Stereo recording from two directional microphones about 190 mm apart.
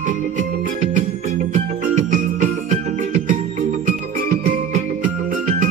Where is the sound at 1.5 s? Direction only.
40° right (ahead or behind).